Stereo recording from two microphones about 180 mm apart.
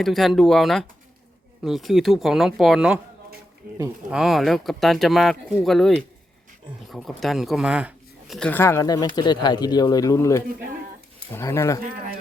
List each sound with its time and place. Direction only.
0.0 s speech: centre (ahead or behind)
4.1 s speech: centre (ahead or behind)
8.4 s speech: 10° left (ahead or behind)